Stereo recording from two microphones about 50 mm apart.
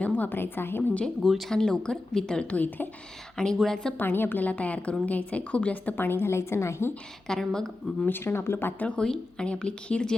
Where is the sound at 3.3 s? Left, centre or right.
Centre.